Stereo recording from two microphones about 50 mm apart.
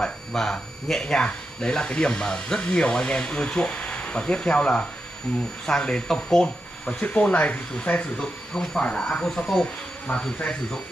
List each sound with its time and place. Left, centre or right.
0.0 s speech: centre; by 8.1 s left
8.2 s speech: centre